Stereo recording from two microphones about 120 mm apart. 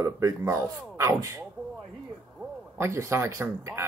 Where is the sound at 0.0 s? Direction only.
25° right (ahead or behind).